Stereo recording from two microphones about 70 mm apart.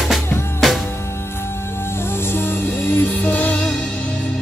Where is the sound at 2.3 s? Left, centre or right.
Left.